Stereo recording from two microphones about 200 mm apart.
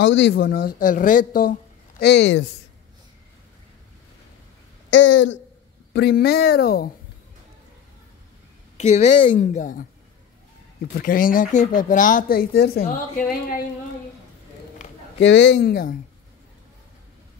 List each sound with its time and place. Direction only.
0.0 s speech: 60° left (ahead or behind)
4.9 s speech: 65° left (ahead or behind)
5.9 s speech: 55° left (ahead or behind)
8.7 s a woman's voice: 35° left (ahead or behind)
11.0 s speech: 45° left (ahead or behind)
15.1 s a man's voice: 65° left (ahead or behind)